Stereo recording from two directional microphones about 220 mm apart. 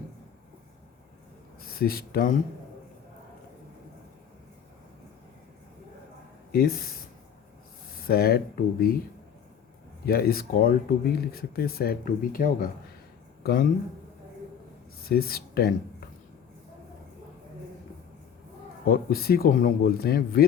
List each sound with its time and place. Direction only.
1.6 s speech: 40° left (ahead or behind)
6.5 s speech: 45° left (ahead or behind)
7.9 s speech: 45° left (ahead or behind)
10.1 s speech: 45° left (ahead or behind)
15.1 s speech: 45° left (ahead or behind)
18.9 s speech: 45° left (ahead or behind)